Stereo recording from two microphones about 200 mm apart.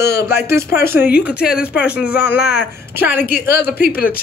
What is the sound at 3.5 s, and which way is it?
Speech, 50° left (ahead or behind).